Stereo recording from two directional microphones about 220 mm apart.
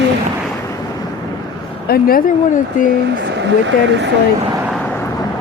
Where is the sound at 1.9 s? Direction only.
40° left (ahead or behind).